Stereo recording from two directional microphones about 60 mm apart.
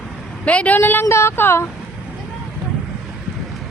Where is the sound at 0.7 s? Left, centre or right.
Left.